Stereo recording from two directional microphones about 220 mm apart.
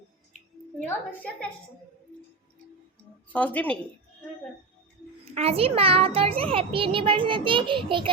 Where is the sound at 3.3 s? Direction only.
5° left (ahead or behind).